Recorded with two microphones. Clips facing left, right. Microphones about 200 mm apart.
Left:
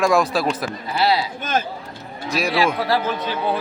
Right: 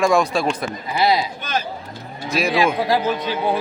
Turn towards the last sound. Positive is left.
turn(degrees=-15)  # may be behind; listen again after turning